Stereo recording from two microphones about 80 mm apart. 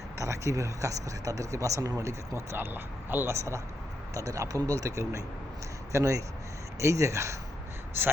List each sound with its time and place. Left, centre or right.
0.2 s speech: right
4.1 s speech: right